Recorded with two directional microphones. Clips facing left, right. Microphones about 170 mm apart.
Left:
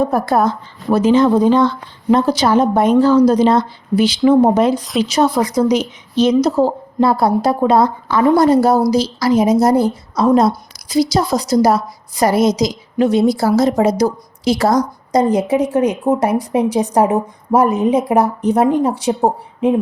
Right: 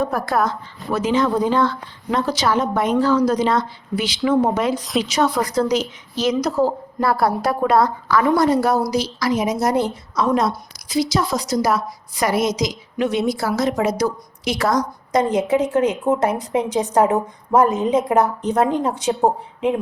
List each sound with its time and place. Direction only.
0.0 s a woman's voice: 30° left (ahead or behind)
2.0 s a woman's voice: 35° left (ahead or behind)
5.4 s a woman's voice: 15° left (ahead or behind); by 15.4 s 35° left (ahead or behind)
15.7 s a woman's voice: 15° left (ahead or behind)